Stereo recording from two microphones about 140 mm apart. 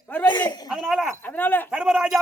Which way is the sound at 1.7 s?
5° right (ahead or behind).